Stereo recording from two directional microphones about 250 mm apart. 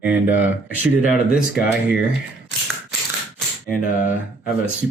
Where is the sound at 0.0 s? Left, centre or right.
Centre.